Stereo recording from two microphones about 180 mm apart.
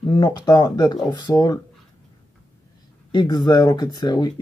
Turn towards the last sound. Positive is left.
turn(degrees=25)  # may be behind; listen again after turning